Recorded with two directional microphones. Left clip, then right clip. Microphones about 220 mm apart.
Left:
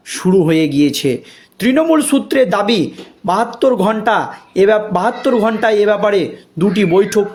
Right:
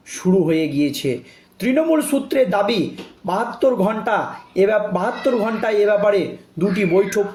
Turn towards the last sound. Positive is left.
turn(degrees=40)  # may be behind; listen again after turning